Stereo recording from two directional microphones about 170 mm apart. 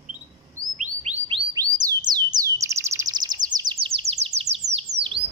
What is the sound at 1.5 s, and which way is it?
Bird, 20° right (ahead or behind).